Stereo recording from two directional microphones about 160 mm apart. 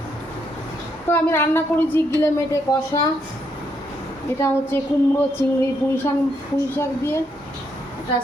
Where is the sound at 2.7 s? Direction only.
25° left (ahead or behind).